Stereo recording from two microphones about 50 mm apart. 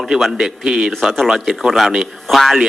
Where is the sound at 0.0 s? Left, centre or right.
Centre.